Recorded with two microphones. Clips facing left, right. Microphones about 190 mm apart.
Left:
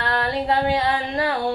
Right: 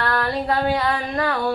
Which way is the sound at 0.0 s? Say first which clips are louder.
Right 1 dB; 25° left (ahead or behind).